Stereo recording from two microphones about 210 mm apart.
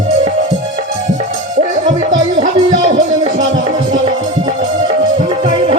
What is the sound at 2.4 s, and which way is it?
Music, 35° right (ahead or behind).